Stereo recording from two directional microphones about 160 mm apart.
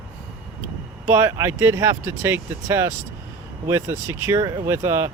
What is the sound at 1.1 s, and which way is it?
Speech, 15° right (ahead or behind).